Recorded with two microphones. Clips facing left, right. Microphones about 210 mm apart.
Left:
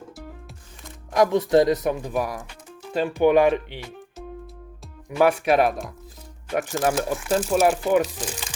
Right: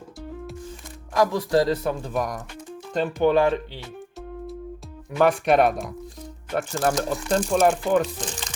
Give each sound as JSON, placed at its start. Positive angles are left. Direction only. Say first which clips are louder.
{"t": 1.1, "sound": "speech", "louder": "left 3 dB", "side_deg": 20}
{"t": 5.1, "sound": "speech", "louder": "even", "side_deg": 5}